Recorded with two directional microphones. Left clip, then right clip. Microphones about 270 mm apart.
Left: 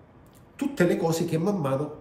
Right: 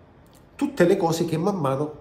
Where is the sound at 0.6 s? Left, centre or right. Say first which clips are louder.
Right 4 dB; centre.